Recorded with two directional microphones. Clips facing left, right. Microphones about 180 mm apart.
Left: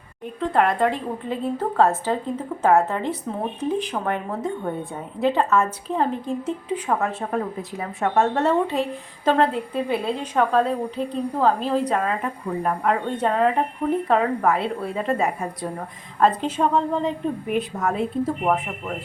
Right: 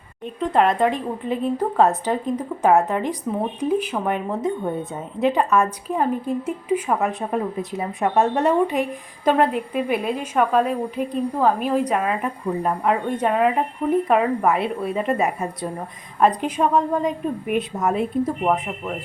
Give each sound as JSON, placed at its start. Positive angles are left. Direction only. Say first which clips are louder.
{"t": 0.3, "sound": "a woman's voice", "louder": "right 2 dB", "side_deg": -20}
{"t": 18.4, "sound": "speech", "louder": "right 1 dB", "side_deg": 0}